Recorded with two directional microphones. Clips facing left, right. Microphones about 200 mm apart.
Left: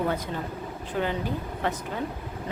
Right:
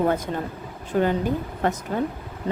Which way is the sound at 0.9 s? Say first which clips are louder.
Right 7 dB; 45° right (ahead or behind).